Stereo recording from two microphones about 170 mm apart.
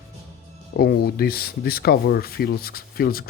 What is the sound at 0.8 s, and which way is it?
Speech, 65° left (ahead or behind).